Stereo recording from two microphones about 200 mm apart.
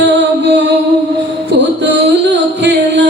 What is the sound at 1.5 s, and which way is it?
Music, 60° right (ahead or behind).